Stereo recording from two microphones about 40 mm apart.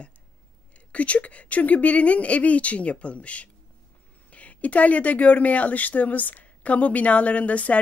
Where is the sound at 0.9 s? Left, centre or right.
Left.